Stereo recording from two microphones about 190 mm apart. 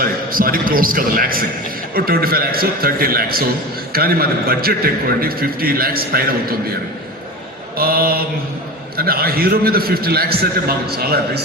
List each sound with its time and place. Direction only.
0.0 s a man's voice: 50° right (ahead or behind)
7.8 s a man's voice: 55° right (ahead or behind)